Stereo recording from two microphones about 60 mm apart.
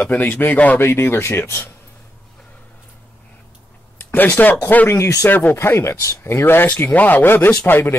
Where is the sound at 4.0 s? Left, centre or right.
Left.